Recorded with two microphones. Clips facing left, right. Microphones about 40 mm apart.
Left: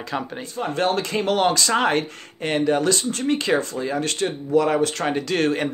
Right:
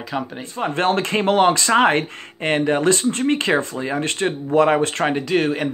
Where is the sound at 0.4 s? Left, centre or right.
Right.